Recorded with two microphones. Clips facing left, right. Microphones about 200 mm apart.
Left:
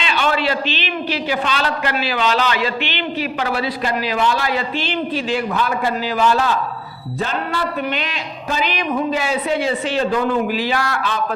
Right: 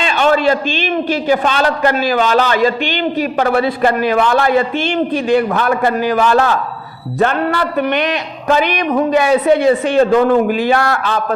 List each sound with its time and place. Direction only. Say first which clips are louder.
0.0 s a man's voice: right 7 dB; 45° right (ahead or behind)